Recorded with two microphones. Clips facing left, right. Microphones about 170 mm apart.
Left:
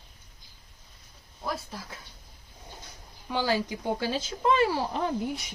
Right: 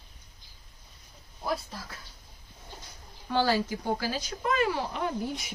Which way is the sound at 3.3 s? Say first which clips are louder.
Right 2 dB; 15° left (ahead or behind).